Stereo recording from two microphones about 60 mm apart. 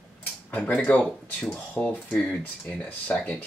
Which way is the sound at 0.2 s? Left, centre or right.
Left.